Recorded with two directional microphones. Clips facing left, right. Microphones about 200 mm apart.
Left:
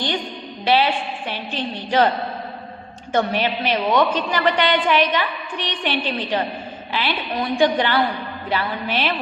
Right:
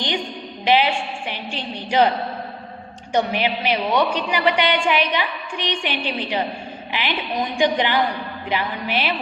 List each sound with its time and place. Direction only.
0.6 s a woman's voice: 15° right (ahead or behind)
3.1 s a woman's voice: 15° right (ahead or behind)